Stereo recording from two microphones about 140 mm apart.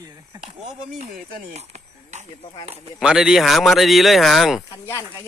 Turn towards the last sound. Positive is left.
turn(degrees=20)  # may be behind; listen again after turning